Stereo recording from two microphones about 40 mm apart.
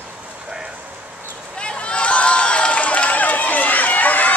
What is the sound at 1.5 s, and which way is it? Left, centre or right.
Run, left.